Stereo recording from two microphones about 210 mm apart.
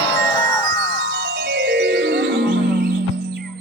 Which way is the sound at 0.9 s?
60° right (ahead or behind).